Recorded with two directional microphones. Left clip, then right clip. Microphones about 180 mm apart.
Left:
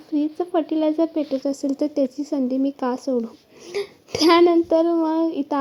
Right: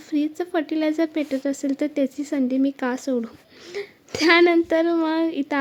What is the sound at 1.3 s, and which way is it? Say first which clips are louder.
Speech: left 1 dB; 25° right (ahead or behind).